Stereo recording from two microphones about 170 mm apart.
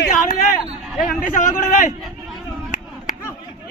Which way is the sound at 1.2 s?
50° left (ahead or behind).